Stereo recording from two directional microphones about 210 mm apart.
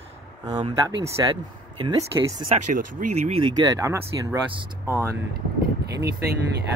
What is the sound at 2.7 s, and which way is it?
Speech, 35° right (ahead or behind).